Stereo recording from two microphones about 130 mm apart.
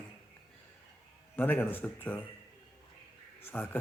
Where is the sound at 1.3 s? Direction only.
15° left (ahead or behind).